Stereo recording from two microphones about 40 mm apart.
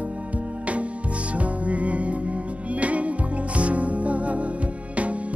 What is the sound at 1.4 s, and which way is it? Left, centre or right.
Music, right.